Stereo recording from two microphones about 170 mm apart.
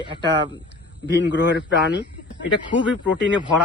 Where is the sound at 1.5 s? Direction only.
90° left.